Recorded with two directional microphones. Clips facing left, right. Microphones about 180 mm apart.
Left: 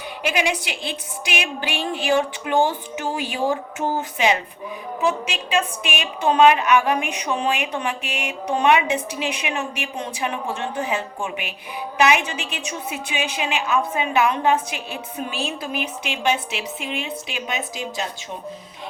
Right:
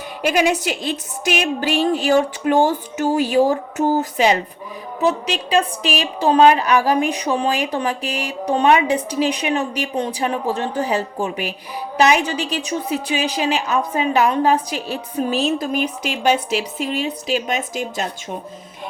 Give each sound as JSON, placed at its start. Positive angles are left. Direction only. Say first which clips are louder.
{"t": 0.2, "sound": "a woman's voice", "louder": "right 6 dB", "side_deg": -40}